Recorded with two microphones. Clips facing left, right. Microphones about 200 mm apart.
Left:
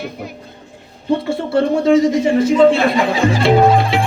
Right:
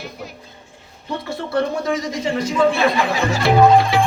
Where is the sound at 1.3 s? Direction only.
25° left (ahead or behind).